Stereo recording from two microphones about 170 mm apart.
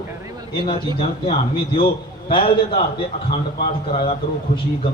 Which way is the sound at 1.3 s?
35° left (ahead or behind).